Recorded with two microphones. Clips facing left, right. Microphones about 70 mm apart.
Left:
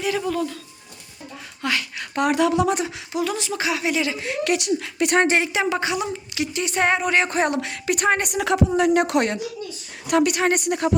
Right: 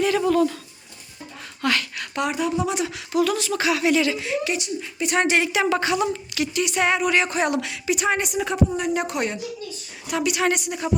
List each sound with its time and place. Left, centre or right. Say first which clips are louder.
0.3 s speech: right 5 dB; centre
1.6 s a sound: right 2 dB; centre
2.3 s speech: left 7 dB; left
2.8 s speech: right 3 dB; left
4.2 s a woman's voice: left 2 dB; left
5.1 s speech: left 1 dB; left
7.9 s a woman's voice: left 2 dB; left
10.1 s a woman's voice: left 3 dB; left